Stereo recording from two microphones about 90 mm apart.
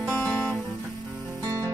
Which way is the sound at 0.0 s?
20° left (ahead or behind).